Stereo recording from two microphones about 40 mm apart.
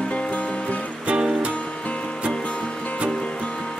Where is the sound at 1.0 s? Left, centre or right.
Right.